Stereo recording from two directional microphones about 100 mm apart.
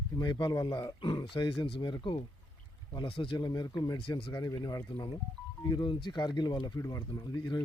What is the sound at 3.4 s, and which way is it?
Speech, 45° left (ahead or behind).